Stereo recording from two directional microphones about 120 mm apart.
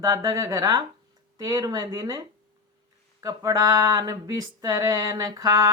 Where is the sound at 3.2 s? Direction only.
30° right (ahead or behind).